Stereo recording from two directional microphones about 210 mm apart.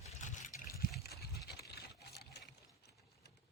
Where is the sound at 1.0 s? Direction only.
50° left (ahead or behind).